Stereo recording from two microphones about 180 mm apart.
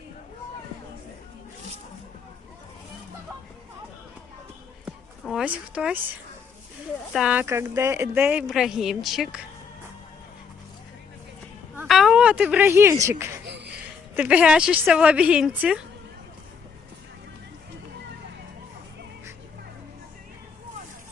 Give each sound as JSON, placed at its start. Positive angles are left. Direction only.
{"t": 5.2, "sound": "speech", "side_deg": -5}
{"t": 7.1, "sound": "speech", "side_deg": -5}
{"t": 11.9, "sound": "a sound", "side_deg": 0}
{"t": 13.1, "sound": "speech", "side_deg": -15}
{"t": 13.4, "sound": "a sound", "side_deg": -70}
{"t": 14.2, "sound": "speech", "side_deg": -5}